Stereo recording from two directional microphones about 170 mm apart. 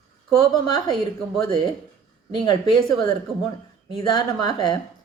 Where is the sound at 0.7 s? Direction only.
25° left (ahead or behind).